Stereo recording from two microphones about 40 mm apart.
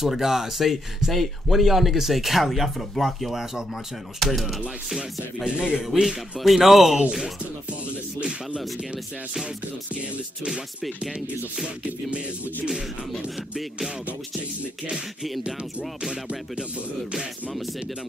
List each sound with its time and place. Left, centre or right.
0.0 s speech: centre
5.6 s music: right
6.0 s speech: centre
16.0 s music: centre